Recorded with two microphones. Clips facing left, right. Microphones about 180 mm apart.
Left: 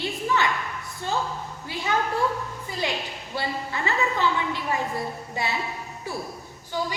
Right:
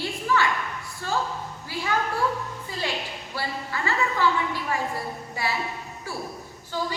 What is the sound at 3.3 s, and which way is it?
A woman's voice, 20° left (ahead or behind).